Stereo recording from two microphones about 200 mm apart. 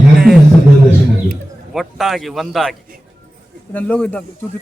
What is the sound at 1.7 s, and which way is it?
A man's voice, centre (ahead or behind).